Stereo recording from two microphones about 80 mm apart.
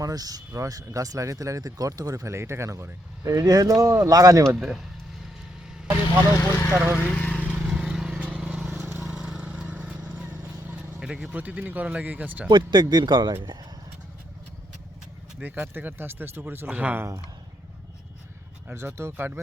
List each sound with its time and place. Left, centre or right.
0.0 s speech: right
4.5 s speech: centre
6.3 s speech: left
6.8 s speech: centre
7.3 s vehicle: centre
9.0 s a sound: centre
11.0 s speech: centre
11.3 s speech: centre
12.5 s speech: right
15.4 s speech: right
18.7 s speech: right